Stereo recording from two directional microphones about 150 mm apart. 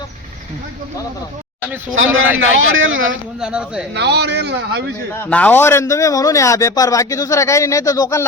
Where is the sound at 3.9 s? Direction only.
90° right.